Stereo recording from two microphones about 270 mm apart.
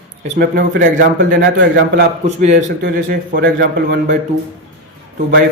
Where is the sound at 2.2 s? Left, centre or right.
Right.